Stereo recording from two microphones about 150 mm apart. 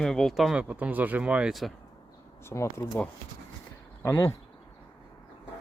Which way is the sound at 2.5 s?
15° left (ahead or behind).